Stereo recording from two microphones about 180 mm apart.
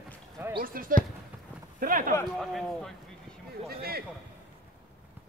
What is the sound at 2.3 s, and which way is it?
Speech, centre (ahead or behind).